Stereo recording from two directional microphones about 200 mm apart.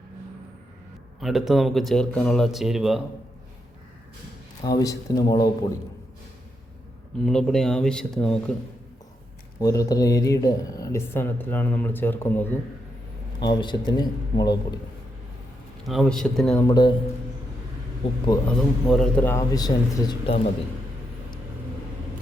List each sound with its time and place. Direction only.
1.2 s speech: centre (ahead or behind)
4.6 s speech: 20° left (ahead or behind)
7.3 s speech: centre (ahead or behind)
9.6 s speech: 20° left (ahead or behind)
13.4 s speech: 20° left (ahead or behind)
15.9 s speech: centre (ahead or behind)
16.6 s speech: 20° left (ahead or behind)
18.5 s speech: 5° left (ahead or behind); by 20.4 s 25° left (ahead or behind)